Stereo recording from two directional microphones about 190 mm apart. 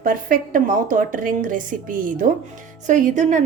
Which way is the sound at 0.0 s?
45° right (ahead or behind).